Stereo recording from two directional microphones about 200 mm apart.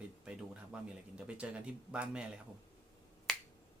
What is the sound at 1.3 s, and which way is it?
Speech, 5° right (ahead or behind).